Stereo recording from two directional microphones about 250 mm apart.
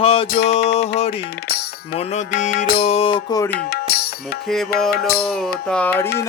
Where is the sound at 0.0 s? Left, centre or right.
Left.